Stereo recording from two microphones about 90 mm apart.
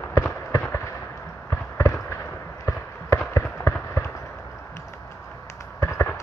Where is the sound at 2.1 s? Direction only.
35° left (ahead or behind).